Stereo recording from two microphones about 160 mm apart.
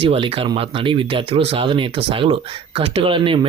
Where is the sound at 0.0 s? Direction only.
35° right (ahead or behind).